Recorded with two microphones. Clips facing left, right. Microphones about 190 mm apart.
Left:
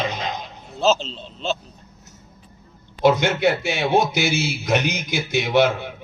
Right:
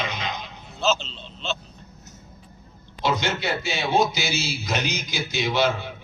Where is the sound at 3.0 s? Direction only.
55° left (ahead or behind).